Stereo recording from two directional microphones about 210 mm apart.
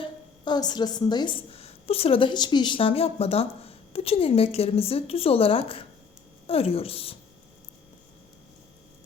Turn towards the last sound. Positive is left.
turn(degrees=25)  # may be behind; listen again after turning